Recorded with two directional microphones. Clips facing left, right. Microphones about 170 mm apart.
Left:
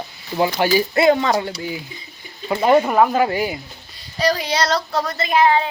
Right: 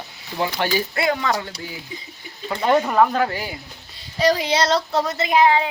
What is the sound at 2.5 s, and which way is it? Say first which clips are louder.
Speech: left 4 dB; 10° left (ahead or behind).